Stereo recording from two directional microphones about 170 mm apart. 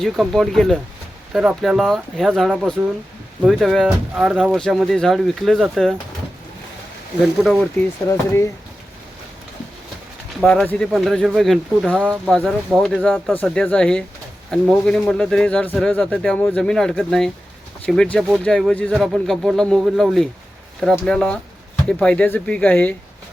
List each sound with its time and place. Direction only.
0.0 s speech: centre (ahead or behind)
7.2 s speech: centre (ahead or behind)
8.0 s speech: 15° left (ahead or behind)
10.4 s speech: 5° left (ahead or behind)